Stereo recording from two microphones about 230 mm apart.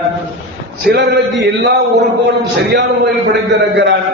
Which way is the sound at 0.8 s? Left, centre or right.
Right.